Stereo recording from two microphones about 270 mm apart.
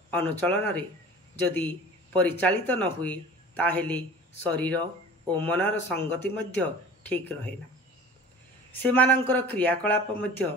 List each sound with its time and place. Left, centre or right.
0.1 s speech: centre
8.8 s speech: centre